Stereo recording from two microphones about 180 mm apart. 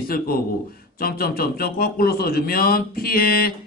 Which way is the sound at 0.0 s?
55° left (ahead or behind).